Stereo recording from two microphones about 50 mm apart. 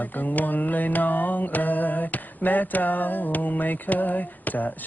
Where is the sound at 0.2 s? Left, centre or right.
Left.